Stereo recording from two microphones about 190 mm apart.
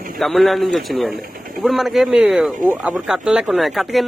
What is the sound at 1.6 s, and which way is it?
Speech, centre (ahead or behind).